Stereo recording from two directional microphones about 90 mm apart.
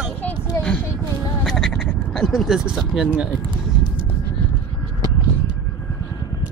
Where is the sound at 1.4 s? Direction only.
5° left (ahead or behind).